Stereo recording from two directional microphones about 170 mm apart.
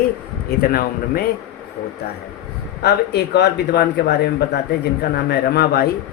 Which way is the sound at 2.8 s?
75° left (ahead or behind).